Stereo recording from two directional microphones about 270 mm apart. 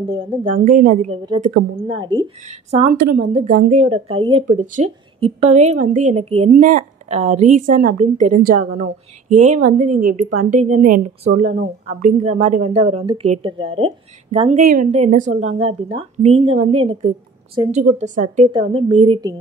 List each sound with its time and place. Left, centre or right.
0.1 s speech: right
1.9 s speech: centre